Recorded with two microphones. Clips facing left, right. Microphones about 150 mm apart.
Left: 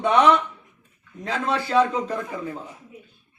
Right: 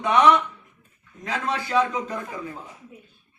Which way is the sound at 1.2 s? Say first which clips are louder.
Left 2 dB; 30° left (ahead or behind).